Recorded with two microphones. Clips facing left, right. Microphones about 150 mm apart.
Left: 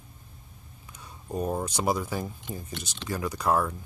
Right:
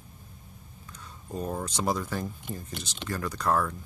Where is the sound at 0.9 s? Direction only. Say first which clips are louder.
Left 3 dB; 15° left (ahead or behind).